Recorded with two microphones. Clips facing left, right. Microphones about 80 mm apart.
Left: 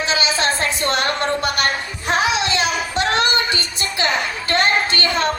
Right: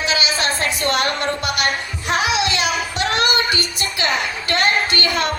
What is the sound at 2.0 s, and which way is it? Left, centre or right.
Female singing, left.